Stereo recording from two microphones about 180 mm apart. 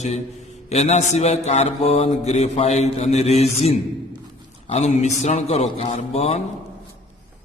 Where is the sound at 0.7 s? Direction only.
35° left (ahead or behind).